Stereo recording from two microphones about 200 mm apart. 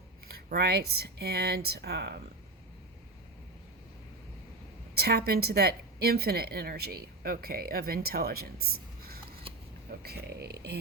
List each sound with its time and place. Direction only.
0.3 s a woman's voice: 50° right (ahead or behind)
4.9 s a woman's voice: 50° right (ahead or behind)